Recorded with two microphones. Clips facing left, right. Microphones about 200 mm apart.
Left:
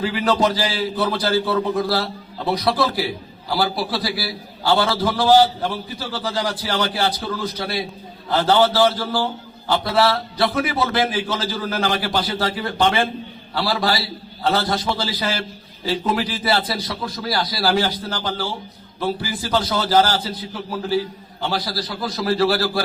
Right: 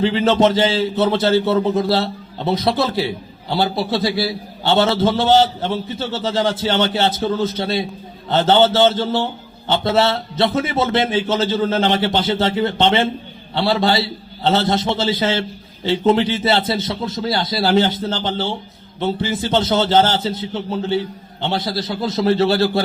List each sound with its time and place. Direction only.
0.0 s a man's voice: 25° right (ahead or behind)